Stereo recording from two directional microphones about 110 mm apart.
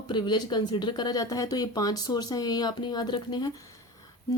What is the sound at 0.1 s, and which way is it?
Speech, 45° left (ahead or behind).